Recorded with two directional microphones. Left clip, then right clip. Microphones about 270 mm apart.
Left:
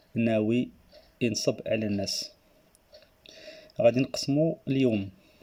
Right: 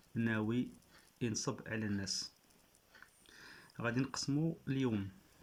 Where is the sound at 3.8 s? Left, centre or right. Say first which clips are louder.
Left 16 dB; centre.